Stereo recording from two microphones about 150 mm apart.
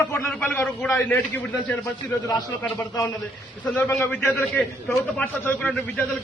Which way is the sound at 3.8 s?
20° left (ahead or behind).